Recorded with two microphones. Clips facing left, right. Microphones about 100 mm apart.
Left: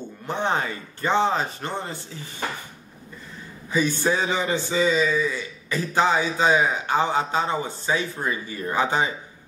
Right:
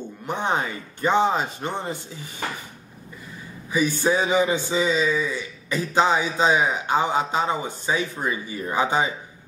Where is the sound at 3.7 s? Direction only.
15° right (ahead or behind).